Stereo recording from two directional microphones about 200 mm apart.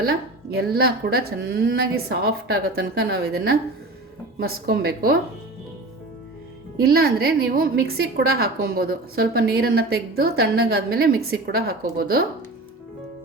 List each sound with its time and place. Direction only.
0.0 s a woman's voice: 50° right (ahead or behind)
6.7 s a woman's voice: 50° right (ahead or behind)